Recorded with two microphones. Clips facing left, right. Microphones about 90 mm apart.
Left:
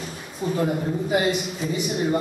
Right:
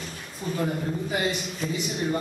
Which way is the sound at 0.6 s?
5° left (ahead or behind).